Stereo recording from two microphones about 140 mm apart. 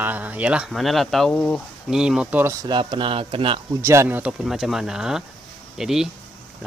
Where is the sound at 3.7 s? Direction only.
20° right (ahead or behind).